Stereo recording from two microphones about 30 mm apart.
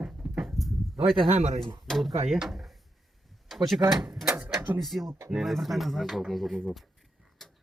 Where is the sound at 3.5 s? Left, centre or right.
Centre.